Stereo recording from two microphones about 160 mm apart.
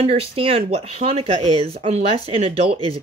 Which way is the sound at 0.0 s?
40° right (ahead or behind).